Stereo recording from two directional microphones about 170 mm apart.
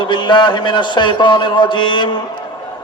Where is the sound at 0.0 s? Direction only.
25° left (ahead or behind).